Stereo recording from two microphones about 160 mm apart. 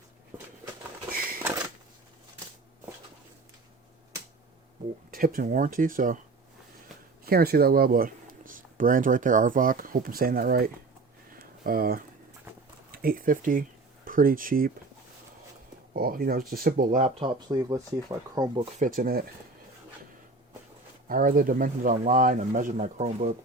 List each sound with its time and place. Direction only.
5.1 s speech: 65° right (ahead or behind)
7.3 s speech: 75° right (ahead or behind)
11.3 s a sound: 65° right (ahead or behind)
12.9 s speech: 65° right (ahead or behind)
15.9 s speech: 65° right (ahead or behind)
17.2 s speech: 25° right (ahead or behind)
18.9 s speech: 60° right (ahead or behind)
21.1 s speech: 60° right (ahead or behind)